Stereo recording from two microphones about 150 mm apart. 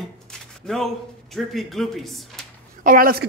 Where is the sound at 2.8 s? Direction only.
70° right (ahead or behind).